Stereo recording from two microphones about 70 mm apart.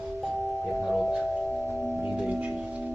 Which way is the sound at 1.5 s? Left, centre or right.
Centre.